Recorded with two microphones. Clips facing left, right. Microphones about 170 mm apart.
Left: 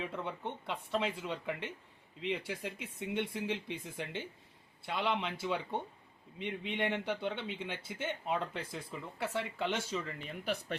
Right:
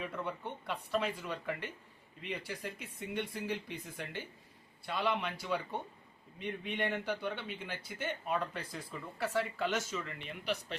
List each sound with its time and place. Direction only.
0.0 s a man's voice: 20° left (ahead or behind)
10.4 s speech: 50° left (ahead or behind)